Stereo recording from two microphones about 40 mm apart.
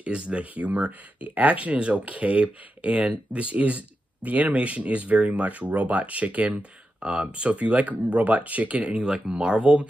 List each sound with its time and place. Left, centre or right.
0.0 s speech: right
7.0 s speech: right
8.8 s speech: right